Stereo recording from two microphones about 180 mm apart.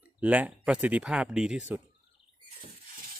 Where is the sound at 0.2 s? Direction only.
10° right (ahead or behind).